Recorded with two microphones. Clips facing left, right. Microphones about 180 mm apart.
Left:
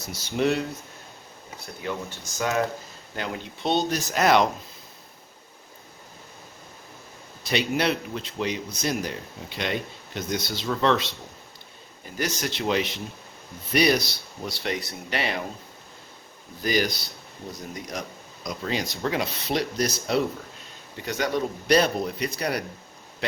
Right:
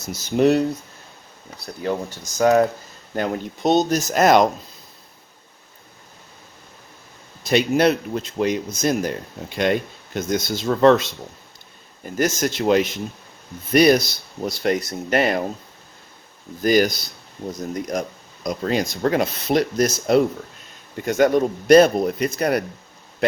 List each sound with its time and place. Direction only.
0.0 s speech: 45° right (ahead or behind)
1.6 s speech: 40° right (ahead or behind)
7.4 s speech: 45° right (ahead or behind)
16.6 s speech: 50° right (ahead or behind)